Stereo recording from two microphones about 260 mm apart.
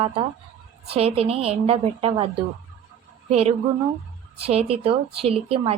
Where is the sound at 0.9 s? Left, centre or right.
Right.